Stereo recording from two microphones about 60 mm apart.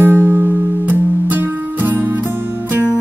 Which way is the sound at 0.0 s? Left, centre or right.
Right.